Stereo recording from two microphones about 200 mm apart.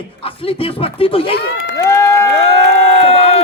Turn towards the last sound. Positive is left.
turn(degrees=30)  # may be behind; listen again after turning